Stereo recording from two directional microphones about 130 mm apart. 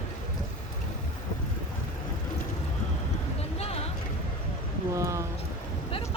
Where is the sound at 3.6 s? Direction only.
50° left (ahead or behind).